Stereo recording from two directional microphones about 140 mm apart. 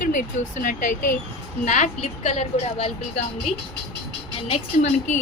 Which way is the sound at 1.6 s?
60° left (ahead or behind).